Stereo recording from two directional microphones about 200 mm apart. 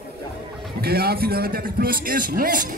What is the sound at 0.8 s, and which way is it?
A man's voice, 50° right (ahead or behind).